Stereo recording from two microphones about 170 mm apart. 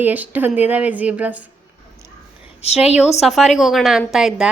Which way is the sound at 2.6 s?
35° left (ahead or behind).